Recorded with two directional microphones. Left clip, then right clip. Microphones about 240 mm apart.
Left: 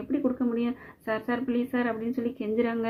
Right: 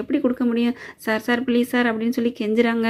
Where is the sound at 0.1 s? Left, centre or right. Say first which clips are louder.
Right 6 dB; right.